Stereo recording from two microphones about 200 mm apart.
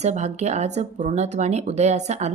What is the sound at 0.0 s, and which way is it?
A woman's voice, 35° right (ahead or behind).